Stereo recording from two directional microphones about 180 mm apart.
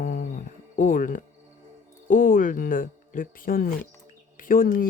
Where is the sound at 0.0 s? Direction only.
45° left (ahead or behind).